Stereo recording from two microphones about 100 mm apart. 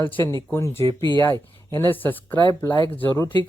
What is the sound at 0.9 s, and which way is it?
Speech, 55° right (ahead or behind).